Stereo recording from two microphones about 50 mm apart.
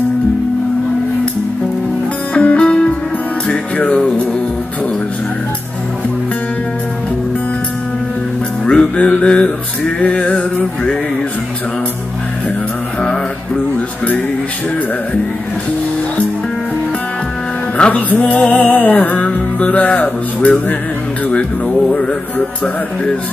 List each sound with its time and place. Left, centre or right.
2.3 s music: left
8.6 s music: centre
13.7 s music: left
17.7 s music: left
21.9 s music: centre